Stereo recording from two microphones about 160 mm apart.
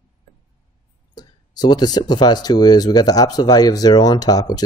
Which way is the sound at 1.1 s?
25° left (ahead or behind).